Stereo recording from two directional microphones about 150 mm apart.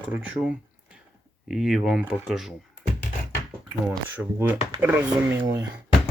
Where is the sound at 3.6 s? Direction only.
15° right (ahead or behind).